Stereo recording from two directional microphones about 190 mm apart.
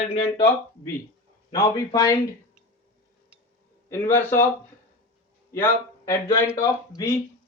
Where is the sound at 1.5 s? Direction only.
15° left (ahead or behind).